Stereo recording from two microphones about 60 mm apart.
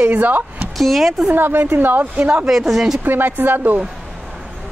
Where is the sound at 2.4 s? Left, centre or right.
Centre.